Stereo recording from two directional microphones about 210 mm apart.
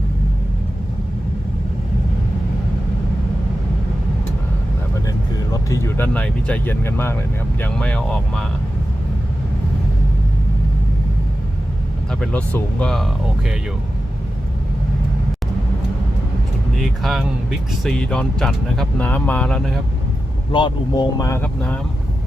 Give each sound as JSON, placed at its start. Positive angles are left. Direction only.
{"t": 5.0, "sound": "vehicle", "side_deg": 15}
{"t": 7.6, "sound": "speech", "side_deg": 5}
{"t": 12.2, "sound": "speech", "side_deg": 5}
{"t": 16.7, "sound": "speech", "side_deg": 0}
{"t": 20.5, "sound": "speech", "side_deg": 20}